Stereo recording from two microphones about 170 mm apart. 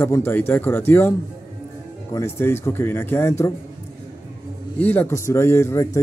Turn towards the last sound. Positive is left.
turn(degrees=15)  # may be behind; listen again after turning